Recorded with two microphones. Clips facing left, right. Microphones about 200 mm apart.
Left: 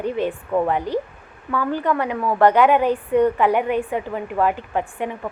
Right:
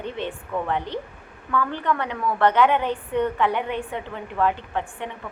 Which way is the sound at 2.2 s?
40° left (ahead or behind).